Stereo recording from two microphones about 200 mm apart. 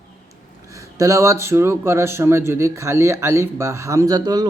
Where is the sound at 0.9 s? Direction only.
15° right (ahead or behind).